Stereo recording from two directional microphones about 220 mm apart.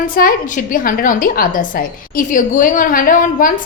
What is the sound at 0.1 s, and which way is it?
A woman's voice, 40° left (ahead or behind).